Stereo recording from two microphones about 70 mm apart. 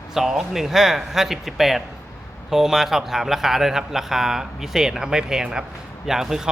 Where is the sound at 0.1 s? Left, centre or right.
Centre.